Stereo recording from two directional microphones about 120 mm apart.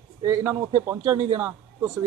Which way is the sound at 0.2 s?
20° right (ahead or behind).